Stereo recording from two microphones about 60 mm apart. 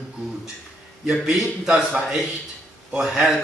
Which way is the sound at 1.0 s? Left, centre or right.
Centre.